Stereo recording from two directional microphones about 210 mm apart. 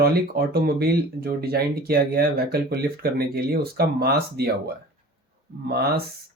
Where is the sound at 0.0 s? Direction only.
45° right (ahead or behind).